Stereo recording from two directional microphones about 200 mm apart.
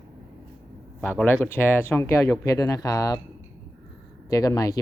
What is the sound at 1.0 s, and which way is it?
Speech, 5° left (ahead or behind).